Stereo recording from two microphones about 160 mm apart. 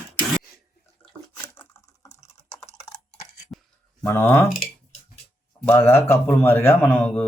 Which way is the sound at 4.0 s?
15° left (ahead or behind).